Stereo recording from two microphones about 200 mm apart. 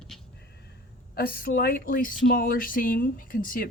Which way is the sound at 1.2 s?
50° left (ahead or behind).